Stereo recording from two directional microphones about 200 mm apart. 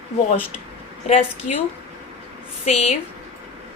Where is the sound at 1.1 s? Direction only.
30° left (ahead or behind).